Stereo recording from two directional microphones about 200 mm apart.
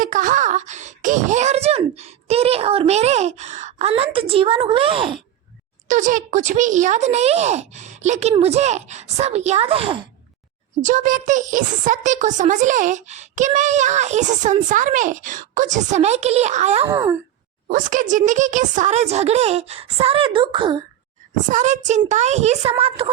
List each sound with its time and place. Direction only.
0.0 s a child's voice: 40° right (ahead or behind)
5.9 s a child's voice: 40° right (ahead or behind)
10.8 s a child's voice: 40° right (ahead or behind)
16.9 s wail: 15° right (ahead or behind)
17.7 s a child's voice: 40° right (ahead or behind); by 20.8 s 25° right (ahead or behind)
21.5 s a child's voice: 35° right (ahead or behind)